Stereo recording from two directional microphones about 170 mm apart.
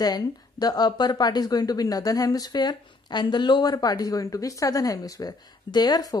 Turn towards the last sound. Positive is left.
turn(degrees=20)  # may be behind; listen again after turning